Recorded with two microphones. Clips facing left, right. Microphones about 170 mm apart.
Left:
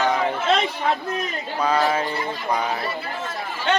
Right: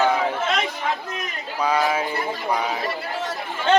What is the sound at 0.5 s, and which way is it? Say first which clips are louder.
Chatter: left 3 dB; 35° left (ahead or behind).